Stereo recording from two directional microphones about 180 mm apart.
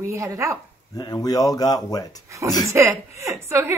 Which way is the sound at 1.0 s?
20° left (ahead or behind).